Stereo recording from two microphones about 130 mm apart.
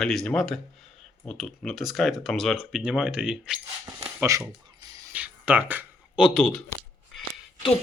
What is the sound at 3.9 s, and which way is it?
Speech, 25° right (ahead or behind).